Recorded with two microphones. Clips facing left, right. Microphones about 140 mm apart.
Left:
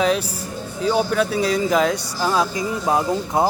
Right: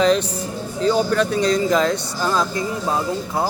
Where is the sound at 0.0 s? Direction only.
5° left (ahead or behind).